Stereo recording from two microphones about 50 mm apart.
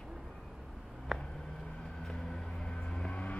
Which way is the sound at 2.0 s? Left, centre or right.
Centre.